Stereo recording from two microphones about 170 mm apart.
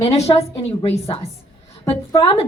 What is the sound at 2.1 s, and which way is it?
Speech, 20° left (ahead or behind).